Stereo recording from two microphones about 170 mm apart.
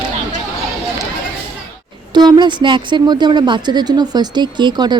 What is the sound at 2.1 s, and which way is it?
Speech, 25° right (ahead or behind).